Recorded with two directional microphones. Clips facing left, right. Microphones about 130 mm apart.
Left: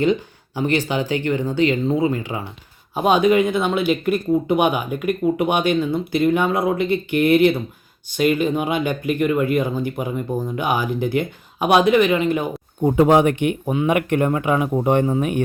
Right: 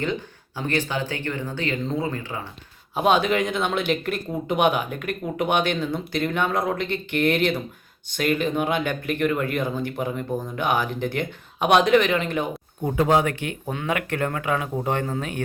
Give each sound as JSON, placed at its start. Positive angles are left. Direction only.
{"t": 0.0, "sound": "speech", "side_deg": 15}
{"t": 2.9, "sound": "speech", "side_deg": 0}
{"t": 12.8, "sound": "speech", "side_deg": 25}